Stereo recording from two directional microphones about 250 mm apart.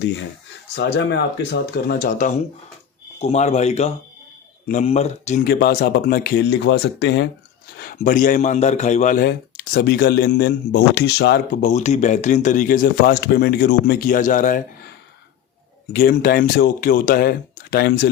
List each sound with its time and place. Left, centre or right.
0.8 s a man's voice: left
11.7 s a man's voice: left
15.9 s a man's voice: left